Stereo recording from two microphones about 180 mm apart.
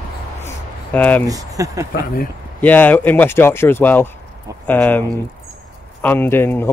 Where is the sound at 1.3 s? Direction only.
20° right (ahead or behind).